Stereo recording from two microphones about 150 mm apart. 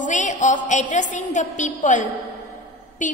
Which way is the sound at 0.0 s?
55° left (ahead or behind).